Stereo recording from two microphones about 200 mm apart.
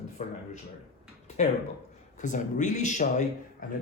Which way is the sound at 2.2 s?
40° left (ahead or behind).